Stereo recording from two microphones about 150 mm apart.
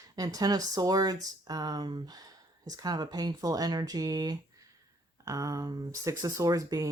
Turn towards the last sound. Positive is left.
turn(degrees=-20)  # may be behind; listen again after turning